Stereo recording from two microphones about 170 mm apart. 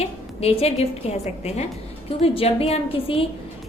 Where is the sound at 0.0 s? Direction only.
35° left (ahead or behind).